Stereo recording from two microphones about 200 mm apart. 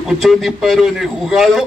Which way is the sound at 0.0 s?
Centre (ahead or behind).